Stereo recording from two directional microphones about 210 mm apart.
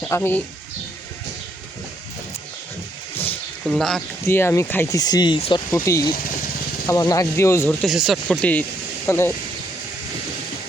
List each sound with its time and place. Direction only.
0.1 s speech: 10° left (ahead or behind)
3.8 s speech: centre (ahead or behind)